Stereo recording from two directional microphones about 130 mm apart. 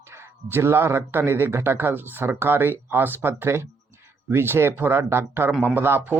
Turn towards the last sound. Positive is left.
turn(degrees=-15)  # may be behind; listen again after turning